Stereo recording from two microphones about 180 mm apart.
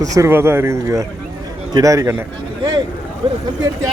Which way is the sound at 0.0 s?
20° right (ahead or behind).